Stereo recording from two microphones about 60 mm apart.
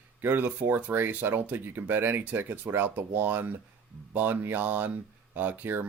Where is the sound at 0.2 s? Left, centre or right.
Right.